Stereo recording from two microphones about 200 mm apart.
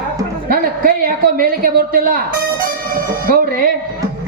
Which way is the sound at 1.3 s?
45° right (ahead or behind).